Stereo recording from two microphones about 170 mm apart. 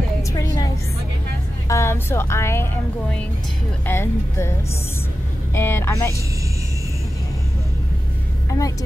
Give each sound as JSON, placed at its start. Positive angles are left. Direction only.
{"t": 0.2, "sound": "a sound", "side_deg": 20}
{"t": 1.7, "sound": "speech", "side_deg": 15}
{"t": 5.5, "sound": "speech", "side_deg": 15}
{"t": 8.5, "sound": "a woman's voice", "side_deg": 20}